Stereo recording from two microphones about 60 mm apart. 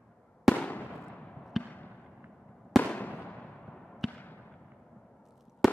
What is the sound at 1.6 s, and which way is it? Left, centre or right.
Basketball bounce, left.